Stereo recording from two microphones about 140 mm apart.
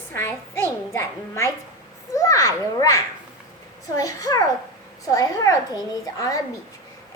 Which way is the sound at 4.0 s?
25° left (ahead or behind).